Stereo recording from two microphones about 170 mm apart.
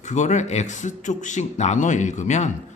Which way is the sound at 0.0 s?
45° left (ahead or behind).